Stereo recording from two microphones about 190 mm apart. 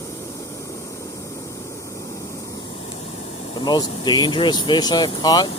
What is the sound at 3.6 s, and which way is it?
Speech, 25° left (ahead or behind).